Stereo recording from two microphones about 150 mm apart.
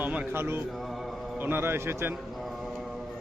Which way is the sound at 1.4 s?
15° right (ahead or behind).